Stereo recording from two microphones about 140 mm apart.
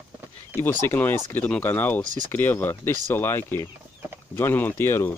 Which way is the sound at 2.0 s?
65° right (ahead or behind).